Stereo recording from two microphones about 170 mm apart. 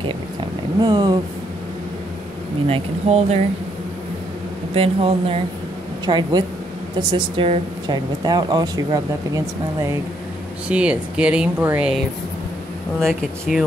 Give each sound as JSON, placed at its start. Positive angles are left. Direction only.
{"t": 0.7, "sound": "speech", "side_deg": -25}
{"t": 2.7, "sound": "speech", "side_deg": -40}
{"t": 4.7, "sound": "speech", "side_deg": -35}
{"t": 7.9, "sound": "speech", "side_deg": -25}
{"t": 10.7, "sound": "speech", "side_deg": -5}
{"t": 13.0, "sound": "speech", "side_deg": 0}